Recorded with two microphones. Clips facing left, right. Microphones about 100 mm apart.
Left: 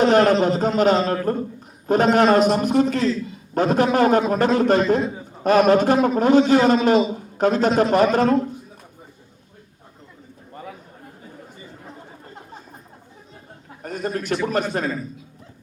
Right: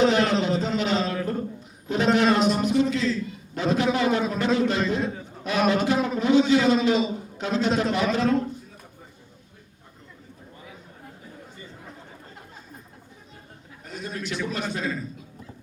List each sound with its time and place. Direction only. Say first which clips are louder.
0.0 s a man's voice: left 5 dB; 50° left (ahead or behind)
13.8 s a man's voice: left 8 dB; 50° left (ahead or behind)